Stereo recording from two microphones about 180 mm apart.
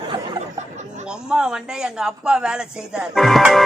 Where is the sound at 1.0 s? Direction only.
5° right (ahead or behind).